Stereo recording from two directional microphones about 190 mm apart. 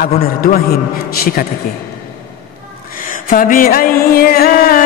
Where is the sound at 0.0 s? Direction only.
50° left (ahead or behind).